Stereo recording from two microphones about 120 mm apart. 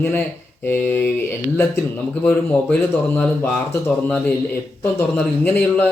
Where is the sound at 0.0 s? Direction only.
15° left (ahead or behind).